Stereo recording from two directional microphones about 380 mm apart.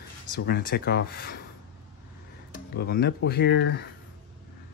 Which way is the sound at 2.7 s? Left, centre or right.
Left.